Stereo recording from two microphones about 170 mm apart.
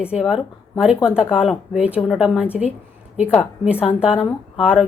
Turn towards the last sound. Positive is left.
turn(degrees=-5)  # may be behind; listen again after turning